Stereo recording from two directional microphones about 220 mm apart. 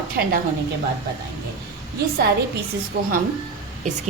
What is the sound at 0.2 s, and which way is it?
Speech, 50° right (ahead or behind).